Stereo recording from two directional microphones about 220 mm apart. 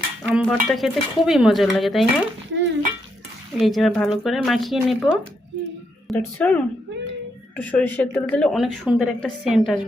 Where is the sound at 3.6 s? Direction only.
Centre (ahead or behind).